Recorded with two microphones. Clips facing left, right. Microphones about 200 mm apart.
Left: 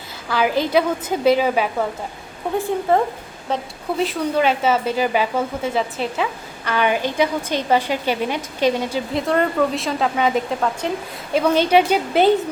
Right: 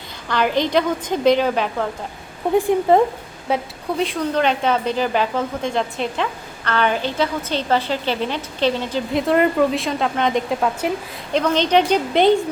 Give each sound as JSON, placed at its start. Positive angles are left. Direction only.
{"t": 0.3, "sound": "a woman's voice", "side_deg": 5}
{"t": 2.6, "sound": "a woman's voice", "side_deg": -15}
{"t": 3.9, "sound": "a woman's voice", "side_deg": 0}
{"t": 9.1, "sound": "speech", "side_deg": 0}
{"t": 10.8, "sound": "a woman's voice", "side_deg": -5}
{"t": 11.3, "sound": "a woman's voice", "side_deg": 10}